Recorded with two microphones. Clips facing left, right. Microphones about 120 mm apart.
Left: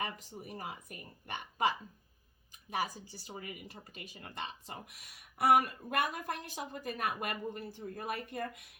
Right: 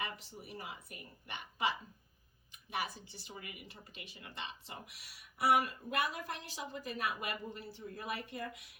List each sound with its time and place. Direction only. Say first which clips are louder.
0.0 s speech: left 3 dB; 45° left (ahead or behind)